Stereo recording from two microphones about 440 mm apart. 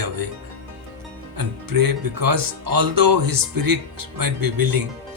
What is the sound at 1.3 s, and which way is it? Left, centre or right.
Speech, right.